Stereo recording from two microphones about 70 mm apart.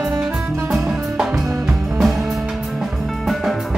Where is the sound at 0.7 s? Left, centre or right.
Centre.